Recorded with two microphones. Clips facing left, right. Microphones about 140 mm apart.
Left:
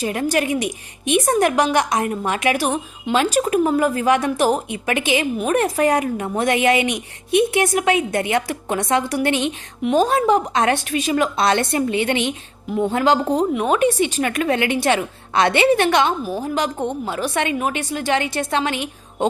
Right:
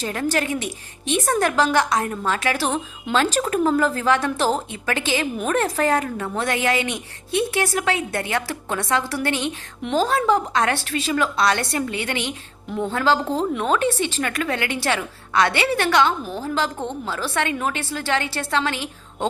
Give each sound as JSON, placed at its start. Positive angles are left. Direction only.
{"t": 0.0, "sound": "a woman's voice", "side_deg": 15}